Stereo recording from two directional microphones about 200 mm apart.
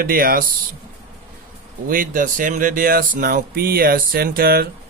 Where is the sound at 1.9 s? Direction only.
45° right (ahead or behind).